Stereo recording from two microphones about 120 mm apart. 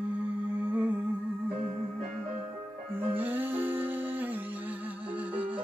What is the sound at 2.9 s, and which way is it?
Music, 15° right (ahead or behind).